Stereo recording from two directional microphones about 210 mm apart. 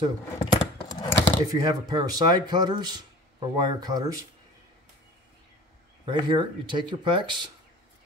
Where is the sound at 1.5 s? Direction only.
20° right (ahead or behind).